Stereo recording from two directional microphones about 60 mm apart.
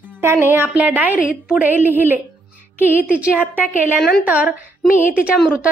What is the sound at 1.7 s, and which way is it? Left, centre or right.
A woman's voice, right.